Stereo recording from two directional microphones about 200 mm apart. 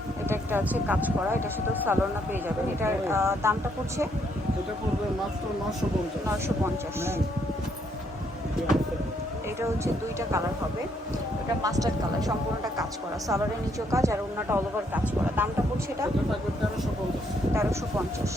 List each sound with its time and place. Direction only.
0.3 s speech: 10° right (ahead or behind)
9.6 s speech: 15° right (ahead or behind)
11.6 s speech: 15° right (ahead or behind)
17.5 s speech: 15° right (ahead or behind)